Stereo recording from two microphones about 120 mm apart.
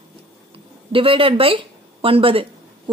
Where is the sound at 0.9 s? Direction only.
50° right (ahead or behind).